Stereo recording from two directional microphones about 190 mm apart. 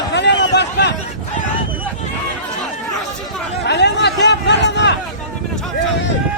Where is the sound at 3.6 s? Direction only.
65° left (ahead or behind).